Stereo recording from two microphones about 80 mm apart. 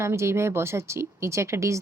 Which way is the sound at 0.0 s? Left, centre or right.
Right.